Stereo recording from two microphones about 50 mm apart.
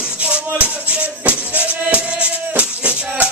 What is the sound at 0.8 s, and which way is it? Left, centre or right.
Music, right.